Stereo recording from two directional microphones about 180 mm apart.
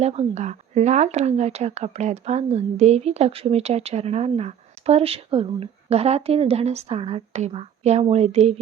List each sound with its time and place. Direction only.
0.0 s speech: 35° right (ahead or behind)